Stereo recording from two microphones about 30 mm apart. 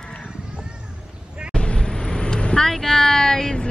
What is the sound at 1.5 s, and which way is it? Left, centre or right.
Vehicle, left.